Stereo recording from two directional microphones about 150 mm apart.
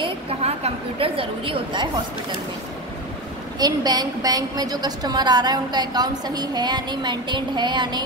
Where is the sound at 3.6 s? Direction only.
25° right (ahead or behind).